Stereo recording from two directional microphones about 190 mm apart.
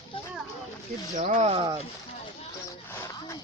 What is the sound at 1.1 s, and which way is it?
Speech, 40° right (ahead or behind).